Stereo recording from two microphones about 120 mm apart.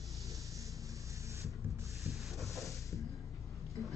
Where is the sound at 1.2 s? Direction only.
25° right (ahead or behind).